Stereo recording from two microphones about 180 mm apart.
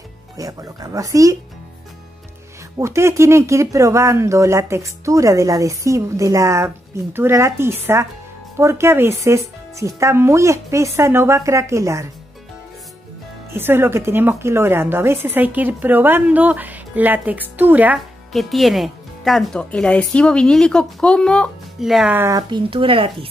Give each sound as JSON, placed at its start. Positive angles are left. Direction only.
{"t": 0.4, "sound": "speech", "side_deg": -20}
{"t": 2.8, "sound": "speech", "side_deg": -15}
{"t": 13.5, "sound": "speech", "side_deg": -10}
{"t": 22.5, "sound": "speech", "side_deg": -30}